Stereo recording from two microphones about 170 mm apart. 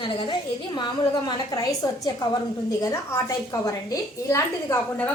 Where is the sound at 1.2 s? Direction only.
20° left (ahead or behind).